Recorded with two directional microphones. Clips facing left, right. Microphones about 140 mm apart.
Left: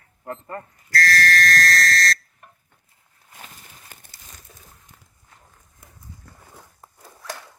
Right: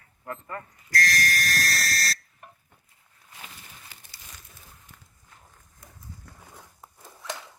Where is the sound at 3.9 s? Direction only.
50° left (ahead or behind).